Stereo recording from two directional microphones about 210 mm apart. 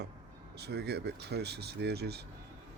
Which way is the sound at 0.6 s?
50° right (ahead or behind).